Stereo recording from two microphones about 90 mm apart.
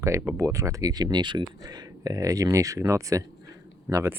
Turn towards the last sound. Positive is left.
turn(degrees=-35)  # may be behind; listen again after turning